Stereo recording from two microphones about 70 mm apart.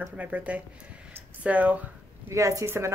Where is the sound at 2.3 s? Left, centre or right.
Right.